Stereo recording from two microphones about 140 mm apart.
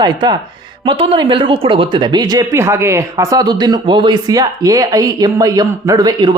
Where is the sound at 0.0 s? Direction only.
30° right (ahead or behind).